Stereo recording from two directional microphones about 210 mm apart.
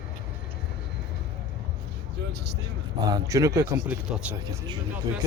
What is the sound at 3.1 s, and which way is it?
Speech, 15° right (ahead or behind).